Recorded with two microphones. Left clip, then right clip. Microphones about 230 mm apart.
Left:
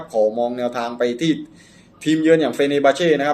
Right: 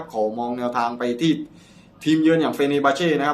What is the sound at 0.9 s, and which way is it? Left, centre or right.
Speech, right.